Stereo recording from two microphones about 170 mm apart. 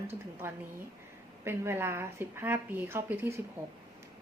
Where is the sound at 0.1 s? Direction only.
15° right (ahead or behind).